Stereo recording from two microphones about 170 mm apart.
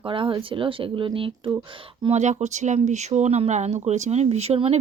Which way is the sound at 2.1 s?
40° right (ahead or behind).